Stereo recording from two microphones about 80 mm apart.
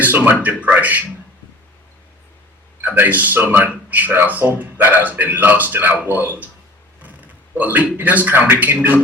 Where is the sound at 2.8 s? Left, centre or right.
Right.